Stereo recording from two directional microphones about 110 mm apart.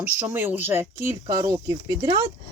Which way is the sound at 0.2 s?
20° right (ahead or behind).